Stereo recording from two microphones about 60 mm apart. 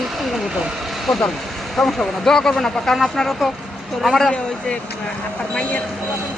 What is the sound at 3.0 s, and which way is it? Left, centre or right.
Speech, centre.